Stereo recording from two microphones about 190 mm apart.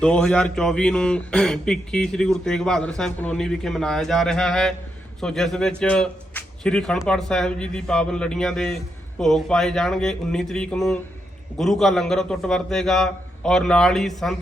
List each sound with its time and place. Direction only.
0.0 s speech: 5° left (ahead or behind)